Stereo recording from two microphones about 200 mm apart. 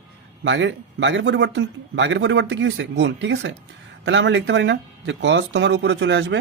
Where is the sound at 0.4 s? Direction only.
65° right (ahead or behind).